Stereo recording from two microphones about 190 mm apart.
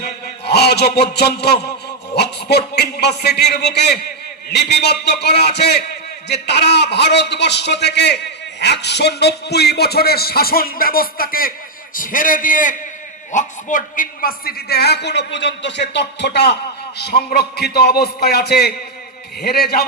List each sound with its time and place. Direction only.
0.0 s a man's voice: 60° left (ahead or behind)